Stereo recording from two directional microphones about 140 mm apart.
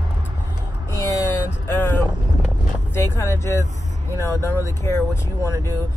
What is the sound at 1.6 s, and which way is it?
Vehicle, 15° left (ahead or behind).